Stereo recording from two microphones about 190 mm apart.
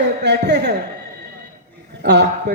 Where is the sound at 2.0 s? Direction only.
65° right (ahead or behind).